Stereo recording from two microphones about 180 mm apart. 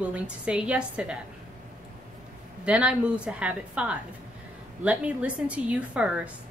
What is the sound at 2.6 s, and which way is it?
A woman's voice, 5° right (ahead or behind).